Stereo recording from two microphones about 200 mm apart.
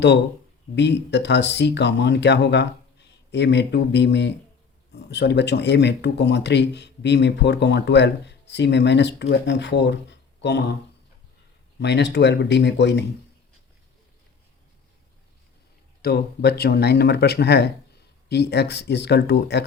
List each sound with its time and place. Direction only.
0.8 s speech: 60° left (ahead or behind)
11.8 s speech: 60° left (ahead or behind)
16.0 s speech: 50° left (ahead or behind)